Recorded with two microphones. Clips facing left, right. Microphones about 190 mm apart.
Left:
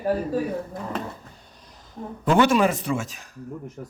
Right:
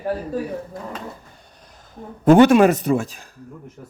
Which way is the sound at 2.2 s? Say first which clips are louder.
Right 7 dB; 50° right (ahead or behind).